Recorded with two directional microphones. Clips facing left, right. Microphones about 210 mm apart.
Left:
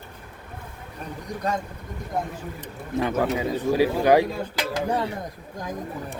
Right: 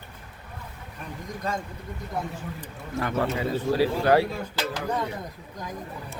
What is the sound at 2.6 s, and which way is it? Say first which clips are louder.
Speech: left 6 dB; 15° left (ahead or behind).